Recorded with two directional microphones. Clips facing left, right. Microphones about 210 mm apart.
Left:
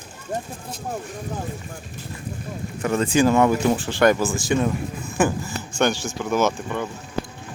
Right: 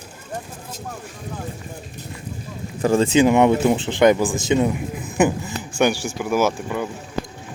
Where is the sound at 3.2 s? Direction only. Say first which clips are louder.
Right 2 dB; 20° right (ahead or behind).